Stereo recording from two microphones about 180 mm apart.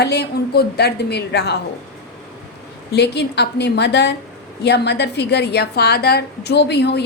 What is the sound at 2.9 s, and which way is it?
A woman's voice, 65° left (ahead or behind).